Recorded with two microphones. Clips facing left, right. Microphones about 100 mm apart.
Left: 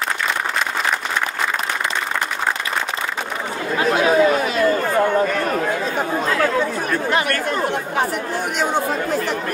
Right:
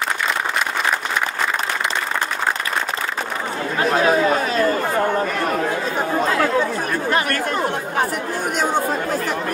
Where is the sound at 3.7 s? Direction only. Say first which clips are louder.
Left 1 dB; 40° right (ahead or behind).